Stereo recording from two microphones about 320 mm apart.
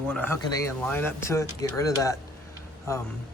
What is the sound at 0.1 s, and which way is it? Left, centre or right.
Speech, centre.